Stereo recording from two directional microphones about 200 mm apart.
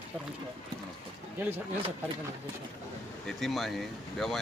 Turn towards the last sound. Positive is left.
turn(degrees=0)  # may be behind; listen again after turning